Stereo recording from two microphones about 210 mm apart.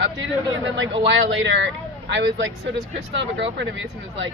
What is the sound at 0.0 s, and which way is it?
Speech, 65° right (ahead or behind).